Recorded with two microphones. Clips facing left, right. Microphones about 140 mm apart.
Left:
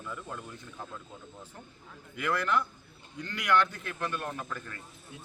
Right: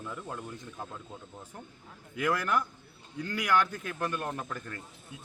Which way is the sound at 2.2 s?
10° right (ahead or behind).